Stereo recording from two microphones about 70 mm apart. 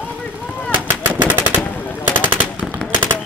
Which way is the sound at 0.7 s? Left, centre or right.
Right.